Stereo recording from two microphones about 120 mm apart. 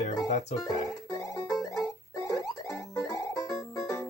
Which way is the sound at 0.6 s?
30° left (ahead or behind).